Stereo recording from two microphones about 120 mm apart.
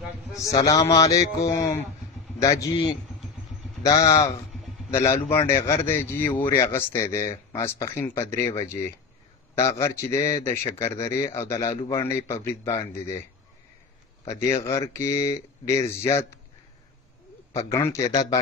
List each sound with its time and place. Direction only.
0.4 s speech: 30° left (ahead or behind)
3.8 s speech: 30° left (ahead or behind)
14.2 s speech: 25° left (ahead or behind)
17.6 s speech: 25° left (ahead or behind)